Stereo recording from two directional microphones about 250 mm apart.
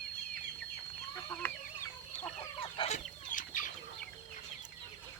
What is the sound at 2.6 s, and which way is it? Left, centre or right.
Chicken, left.